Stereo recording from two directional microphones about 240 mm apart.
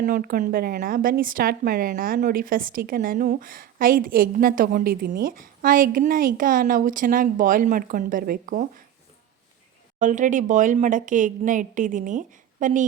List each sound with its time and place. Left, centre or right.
0.0 s speech: right
10.0 s speech: right